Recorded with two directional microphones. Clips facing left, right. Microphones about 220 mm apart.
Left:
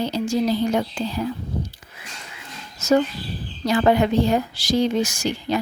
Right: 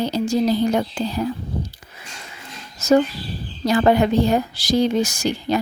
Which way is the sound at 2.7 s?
35° right (ahead or behind).